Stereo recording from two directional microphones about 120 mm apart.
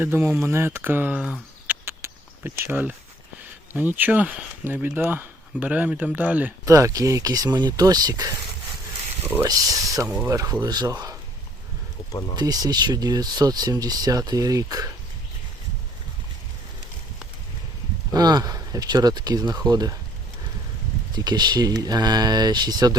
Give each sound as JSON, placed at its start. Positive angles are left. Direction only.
{"t": 0.0, "sound": "speech", "side_deg": -15}
{"t": 6.7, "sound": "speech", "side_deg": -25}
{"t": 9.5, "sound": "speech", "side_deg": -30}
{"t": 12.4, "sound": "speech", "side_deg": -35}
{"t": 18.1, "sound": "speech", "side_deg": -35}
{"t": 21.1, "sound": "speech", "side_deg": -35}